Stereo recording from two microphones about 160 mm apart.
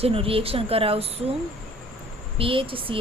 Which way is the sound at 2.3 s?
35° right (ahead or behind).